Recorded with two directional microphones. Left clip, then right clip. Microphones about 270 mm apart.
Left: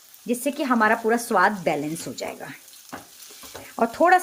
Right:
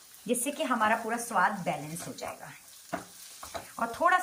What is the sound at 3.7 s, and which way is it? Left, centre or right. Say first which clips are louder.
Speech: left 8 dB; left.